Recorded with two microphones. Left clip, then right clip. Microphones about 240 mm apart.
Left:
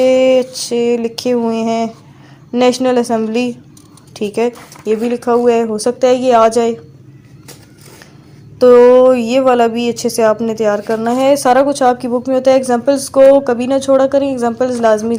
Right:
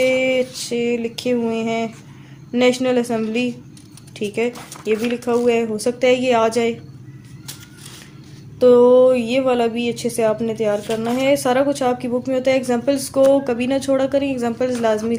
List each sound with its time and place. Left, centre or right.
0.0 s speech: left
8.5 s speech: left